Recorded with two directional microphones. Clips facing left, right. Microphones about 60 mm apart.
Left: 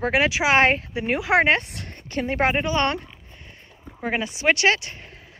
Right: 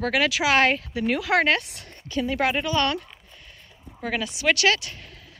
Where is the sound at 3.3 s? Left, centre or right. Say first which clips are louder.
Left 2 dB; left.